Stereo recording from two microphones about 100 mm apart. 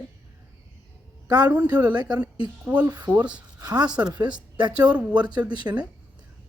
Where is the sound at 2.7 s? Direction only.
20° right (ahead or behind).